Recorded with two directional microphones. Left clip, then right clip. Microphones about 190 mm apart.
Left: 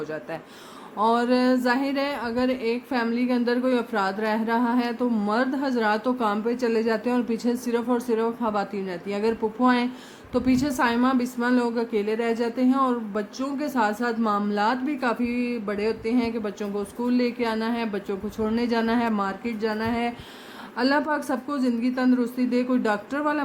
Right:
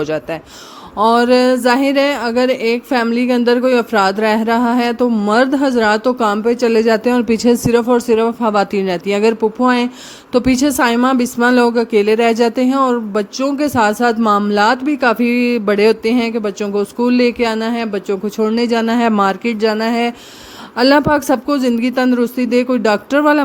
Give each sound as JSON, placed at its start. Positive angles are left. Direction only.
{"t": 0.0, "sound": "speech", "side_deg": -45}